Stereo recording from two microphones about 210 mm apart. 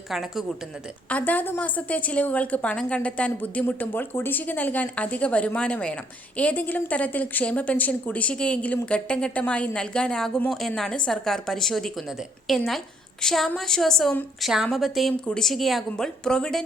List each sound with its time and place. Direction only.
0.1 s a woman's voice: centre (ahead or behind)